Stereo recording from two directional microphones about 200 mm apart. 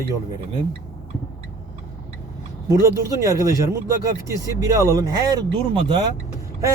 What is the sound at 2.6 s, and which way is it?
Speech, 15° right (ahead or behind).